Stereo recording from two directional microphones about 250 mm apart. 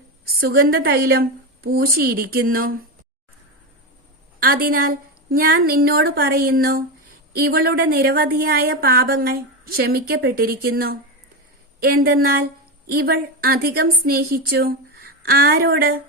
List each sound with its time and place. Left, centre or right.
0.3 s a woman's voice: right
4.4 s a woman's voice: right